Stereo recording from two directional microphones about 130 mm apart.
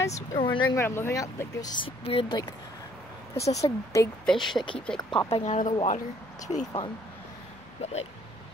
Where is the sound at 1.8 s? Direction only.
40° left (ahead or behind).